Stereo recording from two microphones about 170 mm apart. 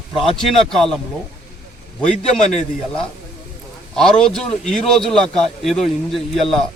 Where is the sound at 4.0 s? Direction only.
5° left (ahead or behind).